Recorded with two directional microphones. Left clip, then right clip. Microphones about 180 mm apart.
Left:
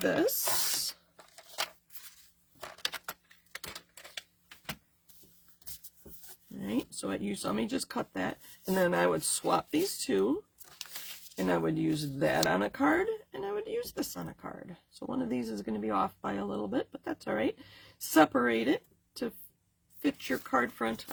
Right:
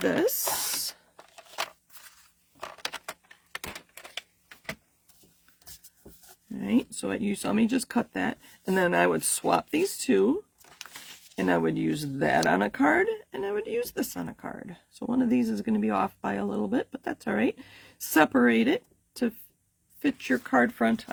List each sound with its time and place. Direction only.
0.1 s speech: 50° right (ahead or behind)
0.7 s ratchet: 45° right (ahead or behind)
6.7 s speech: 50° right (ahead or behind)
10.7 s crumpling: centre (ahead or behind)
11.3 s speech: 45° right (ahead or behind)